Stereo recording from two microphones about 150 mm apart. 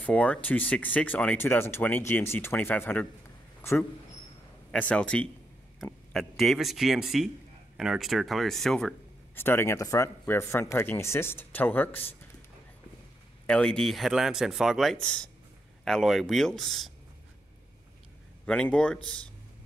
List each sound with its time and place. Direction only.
0.0 s speech: 10° left (ahead or behind)
4.6 s speech: 10° left (ahead or behind)
9.3 s speech: 15° left (ahead or behind)
13.5 s speech: 5° left (ahead or behind)
18.4 s speech: 10° left (ahead or behind)